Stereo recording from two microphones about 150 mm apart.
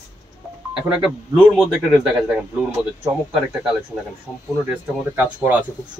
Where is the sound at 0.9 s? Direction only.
10° right (ahead or behind).